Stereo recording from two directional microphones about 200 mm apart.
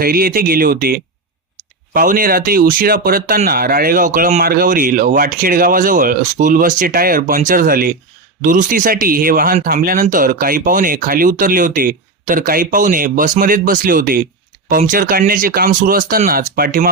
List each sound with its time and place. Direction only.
0.0 s speech: 45° right (ahead or behind)